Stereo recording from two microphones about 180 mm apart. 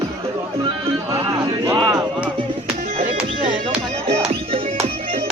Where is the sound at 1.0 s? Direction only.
15° right (ahead or behind).